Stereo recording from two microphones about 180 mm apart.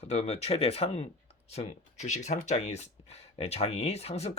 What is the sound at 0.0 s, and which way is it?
Speech, 35° left (ahead or behind).